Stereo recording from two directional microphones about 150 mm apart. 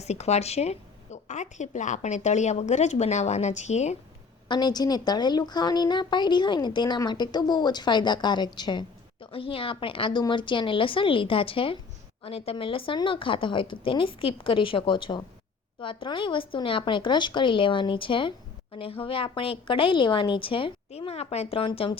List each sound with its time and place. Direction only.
0.0 s a woman's voice: 45° left (ahead or behind)
4.4 s a woman's voice: 30° left (ahead or behind)